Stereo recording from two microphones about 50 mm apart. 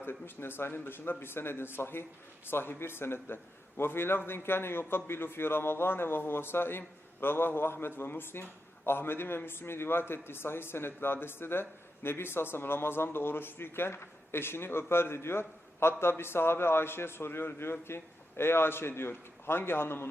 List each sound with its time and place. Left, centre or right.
0.0 s a man's voice: left